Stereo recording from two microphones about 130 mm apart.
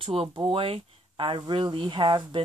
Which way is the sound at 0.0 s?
45° right (ahead or behind).